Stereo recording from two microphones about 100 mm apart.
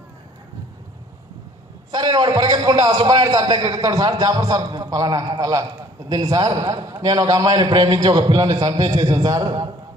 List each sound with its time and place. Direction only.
1.9 s a man's voice: 45° right (ahead or behind)